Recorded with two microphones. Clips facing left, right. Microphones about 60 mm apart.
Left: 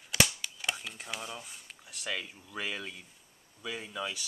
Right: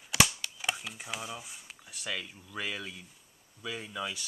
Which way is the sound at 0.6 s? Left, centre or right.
Centre.